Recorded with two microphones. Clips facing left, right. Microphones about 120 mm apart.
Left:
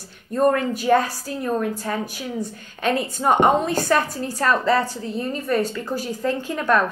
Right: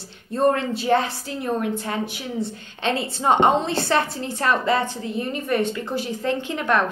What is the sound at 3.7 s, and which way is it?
Speech, 45° left (ahead or behind).